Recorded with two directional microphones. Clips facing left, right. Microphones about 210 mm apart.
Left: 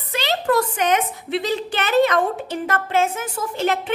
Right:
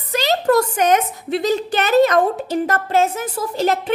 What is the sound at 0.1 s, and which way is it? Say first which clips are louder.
A woman's voice: right 4 dB; 40° right (ahead or behind).